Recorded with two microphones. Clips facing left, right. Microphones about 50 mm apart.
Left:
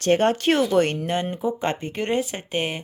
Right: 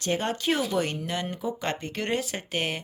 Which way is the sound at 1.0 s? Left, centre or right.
Left.